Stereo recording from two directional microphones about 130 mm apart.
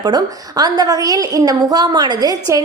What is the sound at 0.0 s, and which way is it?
A woman's voice, 30° right (ahead or behind).